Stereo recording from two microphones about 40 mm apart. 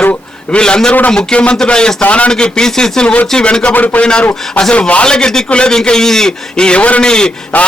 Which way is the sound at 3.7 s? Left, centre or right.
Left.